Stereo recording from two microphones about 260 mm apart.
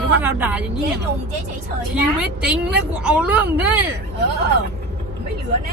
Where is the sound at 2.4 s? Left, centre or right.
Centre.